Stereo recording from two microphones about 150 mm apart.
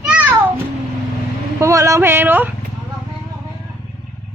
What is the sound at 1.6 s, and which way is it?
Speech, 20° right (ahead or behind).